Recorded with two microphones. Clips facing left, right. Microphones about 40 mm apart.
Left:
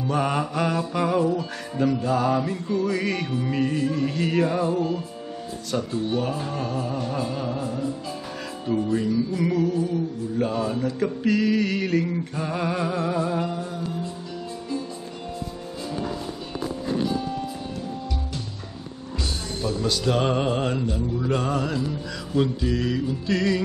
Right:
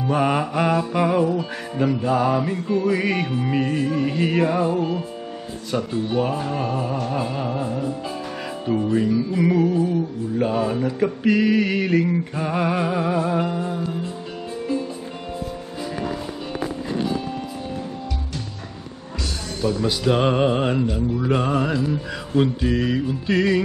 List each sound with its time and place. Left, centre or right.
0.1 s music: centre
19.6 s music: right